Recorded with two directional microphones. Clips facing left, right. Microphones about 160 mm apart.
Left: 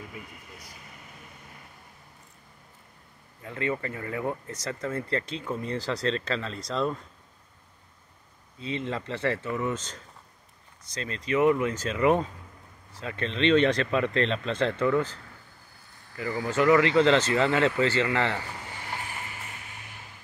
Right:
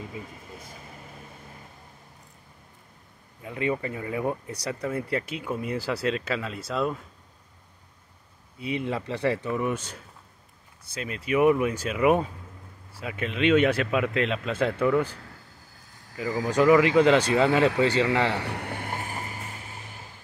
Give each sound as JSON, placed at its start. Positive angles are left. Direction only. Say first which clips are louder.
{"t": 3.4, "sound": "speech", "louder": "right 2 dB", "side_deg": -15}
{"t": 8.5, "sound": "speech", "louder": "right 3 dB", "side_deg": -15}
{"t": 16.4, "sound": "speech", "louder": "right 2 dB", "side_deg": -15}
{"t": 18.4, "sound": "a sound", "louder": "right 7 dB", "side_deg": -65}